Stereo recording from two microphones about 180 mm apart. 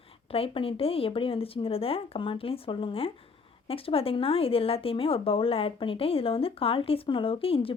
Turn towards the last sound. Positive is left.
turn(degrees=30)  # may be behind; listen again after turning